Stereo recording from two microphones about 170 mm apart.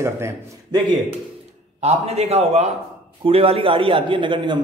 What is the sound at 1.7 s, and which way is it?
A man's voice, 40° right (ahead or behind).